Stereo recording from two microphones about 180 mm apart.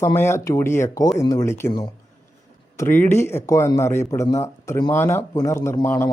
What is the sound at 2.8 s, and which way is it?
Speech, 10° left (ahead or behind).